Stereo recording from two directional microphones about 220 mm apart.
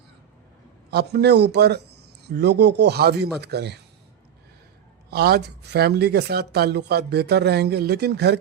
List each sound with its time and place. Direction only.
0.9 s a man's voice: 45° right (ahead or behind)
5.1 s speech: 45° right (ahead or behind)